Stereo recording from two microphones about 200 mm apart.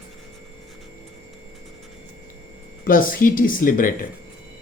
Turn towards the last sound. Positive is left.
turn(degrees=45)  # may be behind; listen again after turning